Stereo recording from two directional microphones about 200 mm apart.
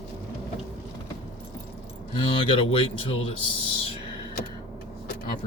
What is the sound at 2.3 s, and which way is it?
Speech, 25° left (ahead or behind).